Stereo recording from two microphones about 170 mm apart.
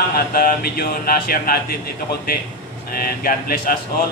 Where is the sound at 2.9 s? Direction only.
60° left (ahead or behind).